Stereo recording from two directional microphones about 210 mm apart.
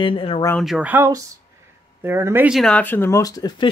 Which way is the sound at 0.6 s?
5° right (ahead or behind).